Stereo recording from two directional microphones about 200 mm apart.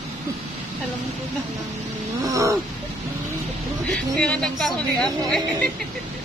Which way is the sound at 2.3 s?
15° right (ahead or behind).